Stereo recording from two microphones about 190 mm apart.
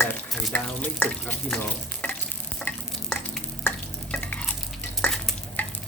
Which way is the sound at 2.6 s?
5° left (ahead or behind).